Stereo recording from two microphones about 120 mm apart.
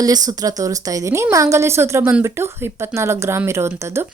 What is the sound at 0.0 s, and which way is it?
Speech, 30° right (ahead or behind).